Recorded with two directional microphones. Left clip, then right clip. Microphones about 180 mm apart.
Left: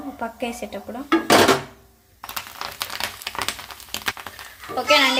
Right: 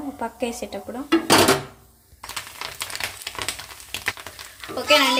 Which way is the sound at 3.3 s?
20° left (ahead or behind).